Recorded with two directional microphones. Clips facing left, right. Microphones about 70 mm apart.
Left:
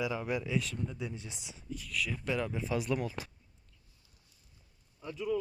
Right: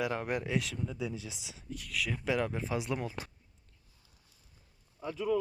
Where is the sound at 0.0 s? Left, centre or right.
Right.